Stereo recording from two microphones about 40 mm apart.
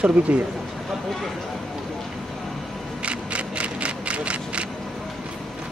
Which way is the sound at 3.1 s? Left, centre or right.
Right.